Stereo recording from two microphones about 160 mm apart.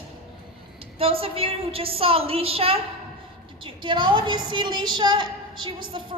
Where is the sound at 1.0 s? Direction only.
35° right (ahead or behind).